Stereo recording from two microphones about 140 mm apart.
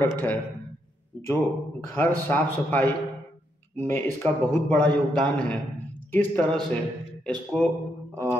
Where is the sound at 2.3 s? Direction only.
15° left (ahead or behind).